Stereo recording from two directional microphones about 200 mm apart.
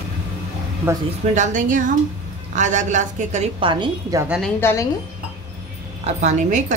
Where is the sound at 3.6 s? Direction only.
25° right (ahead or behind).